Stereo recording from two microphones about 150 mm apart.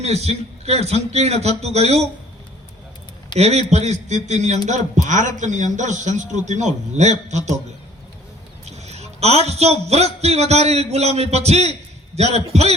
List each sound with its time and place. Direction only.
0.0 s a man's voice: 45° right (ahead or behind)
3.3 s a man's voice: 45° right (ahead or behind)
8.7 s a man's voice: 45° right (ahead or behind)